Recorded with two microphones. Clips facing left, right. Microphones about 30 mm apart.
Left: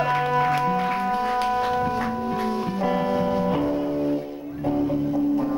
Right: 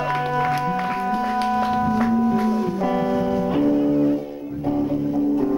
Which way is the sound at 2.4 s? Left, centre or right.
Left.